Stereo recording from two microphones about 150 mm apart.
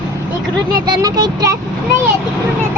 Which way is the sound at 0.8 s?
25° right (ahead or behind).